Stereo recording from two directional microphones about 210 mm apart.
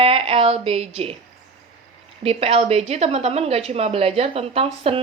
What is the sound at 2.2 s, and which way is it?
A woman's voice, 30° right (ahead or behind).